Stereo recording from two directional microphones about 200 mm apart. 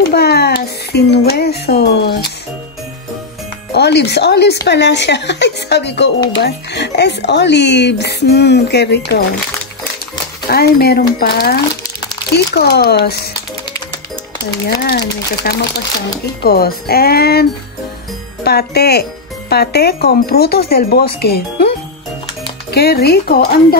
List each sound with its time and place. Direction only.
0.1 s a child's voice: 55° left (ahead or behind)
3.7 s speech: 55° left (ahead or behind)
10.5 s speech: 50° left (ahead or behind)
14.5 s speech: 55° left (ahead or behind)
22.7 s speech: 55° left (ahead or behind)